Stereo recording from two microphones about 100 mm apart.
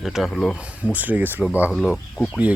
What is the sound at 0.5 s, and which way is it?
Speech, 15° right (ahead or behind).